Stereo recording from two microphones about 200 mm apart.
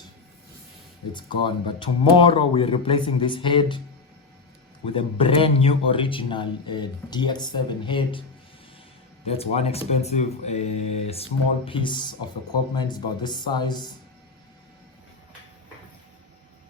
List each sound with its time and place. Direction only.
1.1 s a man's voice: 25° left (ahead or behind)
4.9 s a man's voice: 25° left (ahead or behind)
9.2 s a man's voice: 30° left (ahead or behind)